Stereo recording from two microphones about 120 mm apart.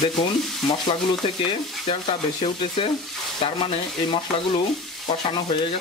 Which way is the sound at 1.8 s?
50° left (ahead or behind).